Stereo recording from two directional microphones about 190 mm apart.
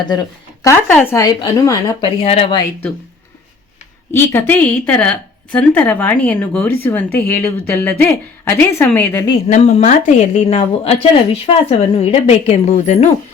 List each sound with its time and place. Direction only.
0.6 s a woman's voice: 15° left (ahead or behind)
2.0 s speech: 30° left (ahead or behind)
4.1 s a woman's voice: 10° left (ahead or behind)
9.5 s a woman's voice: 35° left (ahead or behind)